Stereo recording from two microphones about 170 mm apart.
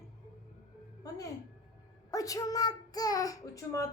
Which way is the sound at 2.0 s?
20° left (ahead or behind).